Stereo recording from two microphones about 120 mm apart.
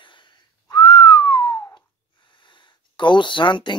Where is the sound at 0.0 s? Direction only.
40° left (ahead or behind).